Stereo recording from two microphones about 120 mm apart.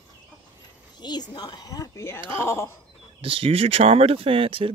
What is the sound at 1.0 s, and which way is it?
A woman's voice, 35° left (ahead or behind).